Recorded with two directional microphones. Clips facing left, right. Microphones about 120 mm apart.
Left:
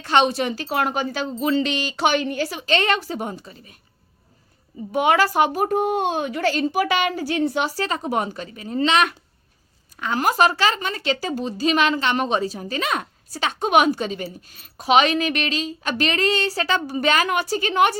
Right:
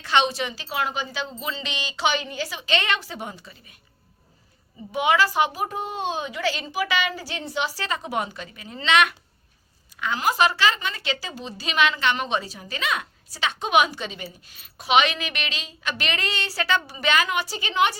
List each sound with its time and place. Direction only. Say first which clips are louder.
0.0 s a woman's voice: left 4 dB; 45° left (ahead or behind)
4.9 s a woman's voice: left 3 dB; 50° left (ahead or behind)